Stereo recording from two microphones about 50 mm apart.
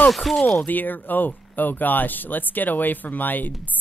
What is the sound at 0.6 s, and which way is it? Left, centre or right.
Speech, left.